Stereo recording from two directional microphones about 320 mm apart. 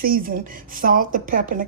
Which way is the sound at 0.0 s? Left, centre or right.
Right.